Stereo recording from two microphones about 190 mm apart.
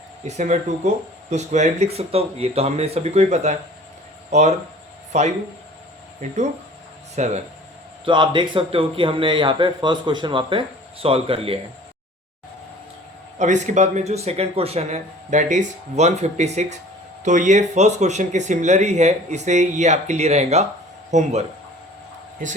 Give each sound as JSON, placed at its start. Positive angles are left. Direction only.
{"t": 0.3, "sound": "speech", "side_deg": -40}
{"t": 7.2, "sound": "speech", "side_deg": -40}
{"t": 8.0, "sound": "speech", "side_deg": -25}
{"t": 13.4, "sound": "speech", "side_deg": -40}